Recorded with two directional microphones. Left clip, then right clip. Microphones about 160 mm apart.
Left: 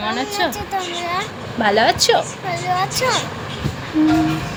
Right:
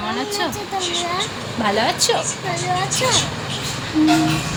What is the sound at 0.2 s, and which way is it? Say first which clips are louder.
Speech: left 2 dB; 55° left (ahead or behind).